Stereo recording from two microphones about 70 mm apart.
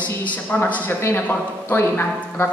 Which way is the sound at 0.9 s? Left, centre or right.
Left.